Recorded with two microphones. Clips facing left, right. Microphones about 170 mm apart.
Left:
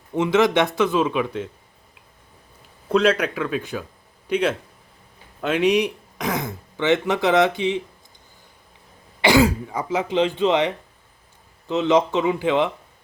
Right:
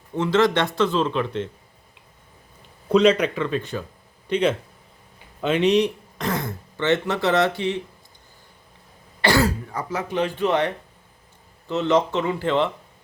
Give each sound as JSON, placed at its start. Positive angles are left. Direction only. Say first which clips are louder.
{"t": 0.1, "sound": "speech", "louder": "left 1 dB", "side_deg": 15}
{"t": 2.9, "sound": "a man's voice", "louder": "right 2 dB", "side_deg": 5}
{"t": 9.2, "sound": "speech", "louder": "left 3 dB", "side_deg": 15}
{"t": 11.7, "sound": "speech", "louder": "left 2 dB", "side_deg": 15}